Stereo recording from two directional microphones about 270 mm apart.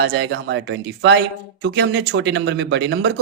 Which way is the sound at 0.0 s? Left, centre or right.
Right.